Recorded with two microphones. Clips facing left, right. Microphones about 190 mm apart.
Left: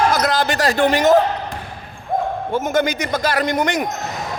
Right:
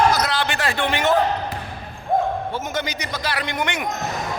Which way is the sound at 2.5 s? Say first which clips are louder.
Left 8 dB; 50° left (ahead or behind).